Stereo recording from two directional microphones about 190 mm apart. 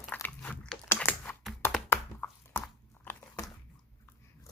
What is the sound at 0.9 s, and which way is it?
Typing, 10° left (ahead or behind).